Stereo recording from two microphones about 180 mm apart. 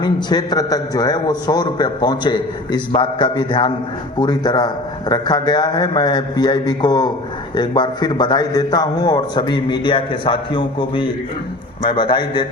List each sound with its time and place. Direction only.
0.0 s a man's voice: 25° left (ahead or behind)